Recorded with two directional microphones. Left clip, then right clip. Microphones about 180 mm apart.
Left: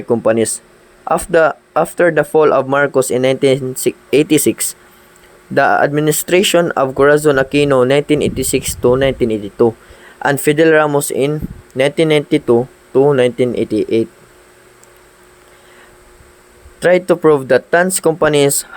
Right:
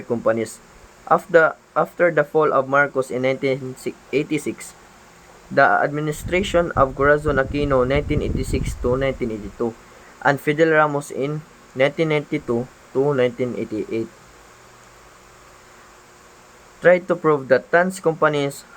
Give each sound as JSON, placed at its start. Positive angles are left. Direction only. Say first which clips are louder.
{"t": 0.1, "sound": "speech", "louder": "left 7 dB", "side_deg": 35}
{"t": 16.8, "sound": "speech", "louder": "left 5 dB", "side_deg": 40}